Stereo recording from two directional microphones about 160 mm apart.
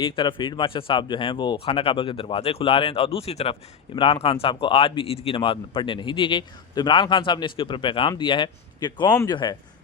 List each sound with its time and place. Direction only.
0.0 s speech: 30° left (ahead or behind)